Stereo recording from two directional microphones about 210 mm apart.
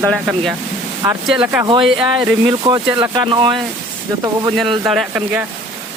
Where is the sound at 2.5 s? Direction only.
15° right (ahead or behind).